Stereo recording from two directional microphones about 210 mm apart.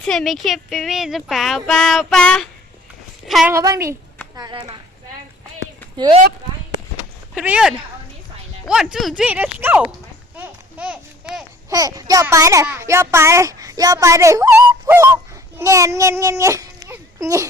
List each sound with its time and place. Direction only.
0.0 s speech: 5° left (ahead or behind)
3.2 s a sound: centre (ahead or behind)
3.5 s a woman's voice: 15° right (ahead or behind)
6.0 s speech: 25° right (ahead or behind)
7.3 s speech: 5° right (ahead or behind)
10.3 s a sound: 5° right (ahead or behind)
11.7 s a child's voice: 15° right (ahead or behind)